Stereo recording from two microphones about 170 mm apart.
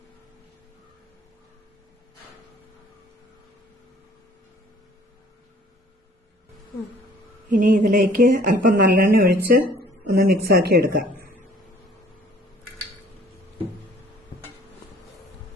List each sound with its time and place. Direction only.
7.5 s speech: 50° right (ahead or behind)
10.1 s speech: 70° right (ahead or behind)